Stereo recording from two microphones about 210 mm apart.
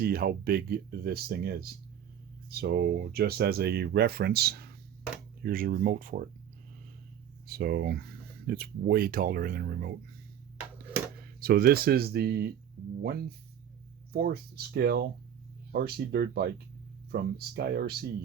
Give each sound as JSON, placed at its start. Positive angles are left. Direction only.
{"t": 0.0, "sound": "speech", "side_deg": -45}
{"t": 7.4, "sound": "speech", "side_deg": -45}
{"t": 11.3, "sound": "speech", "side_deg": -45}
{"t": 12.8, "sound": "music", "side_deg": -50}
{"t": 14.1, "sound": "speech", "side_deg": -45}